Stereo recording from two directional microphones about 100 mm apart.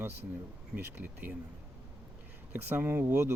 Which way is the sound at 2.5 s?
20° right (ahead or behind).